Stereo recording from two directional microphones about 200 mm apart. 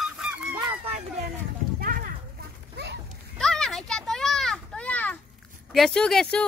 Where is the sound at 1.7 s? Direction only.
45° right (ahead or behind).